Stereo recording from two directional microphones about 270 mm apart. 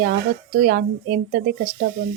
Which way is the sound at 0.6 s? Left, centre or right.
Right.